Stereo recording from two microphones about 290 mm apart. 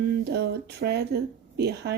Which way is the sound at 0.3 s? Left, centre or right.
Right.